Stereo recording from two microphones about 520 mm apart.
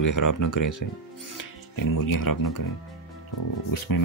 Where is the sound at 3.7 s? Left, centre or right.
Left.